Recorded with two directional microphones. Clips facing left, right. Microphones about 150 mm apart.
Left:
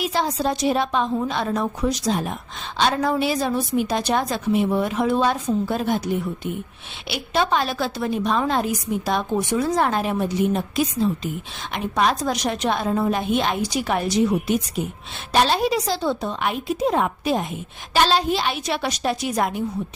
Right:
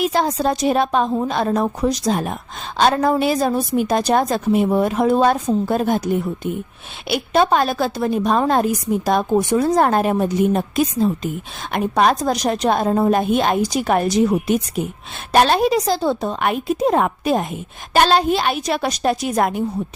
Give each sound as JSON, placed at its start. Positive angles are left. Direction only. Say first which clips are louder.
{"t": 0.0, "sound": "a woman's voice", "louder": "right 4 dB", "side_deg": -50}